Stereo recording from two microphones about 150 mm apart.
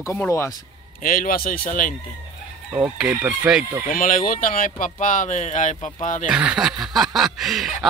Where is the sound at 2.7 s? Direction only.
10° right (ahead or behind).